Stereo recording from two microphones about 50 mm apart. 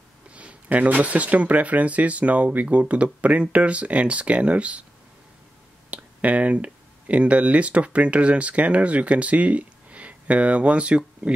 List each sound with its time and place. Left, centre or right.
0.3 s speech: right
5.9 s speech: right